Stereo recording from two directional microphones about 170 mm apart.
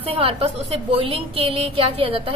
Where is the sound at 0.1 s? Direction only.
35° right (ahead or behind).